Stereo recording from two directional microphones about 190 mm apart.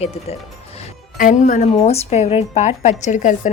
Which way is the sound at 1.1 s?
45° left (ahead or behind).